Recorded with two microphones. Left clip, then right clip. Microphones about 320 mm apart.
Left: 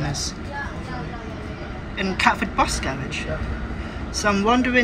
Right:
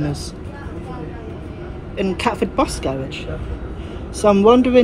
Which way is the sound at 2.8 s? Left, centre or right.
Centre.